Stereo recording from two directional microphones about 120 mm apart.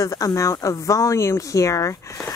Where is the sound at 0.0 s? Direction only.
30° left (ahead or behind).